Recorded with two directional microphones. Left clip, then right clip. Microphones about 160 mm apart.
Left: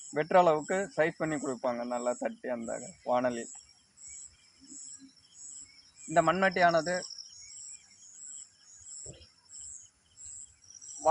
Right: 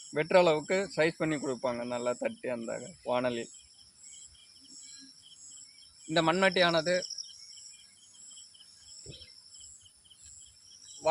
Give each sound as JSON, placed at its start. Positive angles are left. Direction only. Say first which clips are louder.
{"t": 0.1, "sound": "speech", "louder": "even", "side_deg": -40}
{"t": 6.1, "sound": "speech", "louder": "left 1 dB", "side_deg": -50}